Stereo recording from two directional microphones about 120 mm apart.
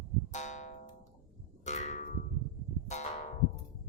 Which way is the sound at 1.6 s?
75° left (ahead or behind).